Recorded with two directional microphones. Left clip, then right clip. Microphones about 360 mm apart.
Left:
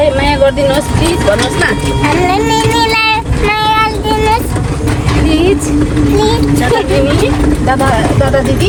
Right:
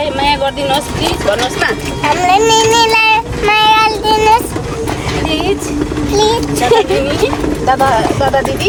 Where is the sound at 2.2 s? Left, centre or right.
Centre.